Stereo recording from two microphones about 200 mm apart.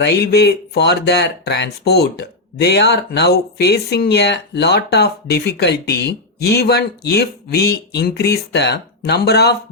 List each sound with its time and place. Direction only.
0.0 s speech: 55° left (ahead or behind)